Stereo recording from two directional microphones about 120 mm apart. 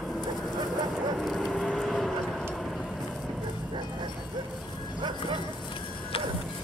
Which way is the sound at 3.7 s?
40° right (ahead or behind).